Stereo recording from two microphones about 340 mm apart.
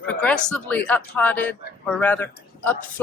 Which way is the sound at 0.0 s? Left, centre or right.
Centre.